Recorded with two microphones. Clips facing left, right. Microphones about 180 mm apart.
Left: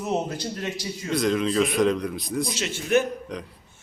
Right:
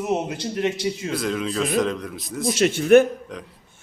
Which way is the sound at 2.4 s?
55° right (ahead or behind).